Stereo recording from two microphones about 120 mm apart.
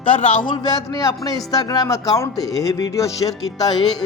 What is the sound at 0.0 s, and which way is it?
A man's voice, 50° left (ahead or behind).